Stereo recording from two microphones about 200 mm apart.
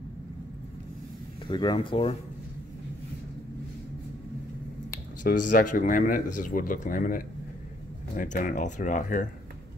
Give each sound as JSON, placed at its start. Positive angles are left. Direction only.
{"t": 1.5, "sound": "speech", "side_deg": 25}
{"t": 5.2, "sound": "a man's voice", "side_deg": 40}